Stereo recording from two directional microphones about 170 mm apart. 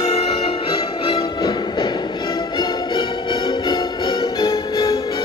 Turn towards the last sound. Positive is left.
turn(degrees=25)  # may be behind; listen again after turning